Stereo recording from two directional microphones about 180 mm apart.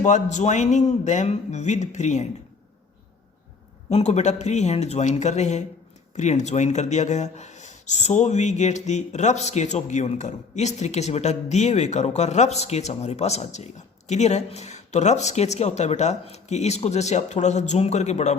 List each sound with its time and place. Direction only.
0.0 s speech: 40° left (ahead or behind)
3.8 s speech: 35° left (ahead or behind)